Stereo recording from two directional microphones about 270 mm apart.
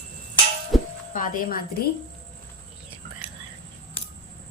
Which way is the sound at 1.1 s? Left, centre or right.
Left.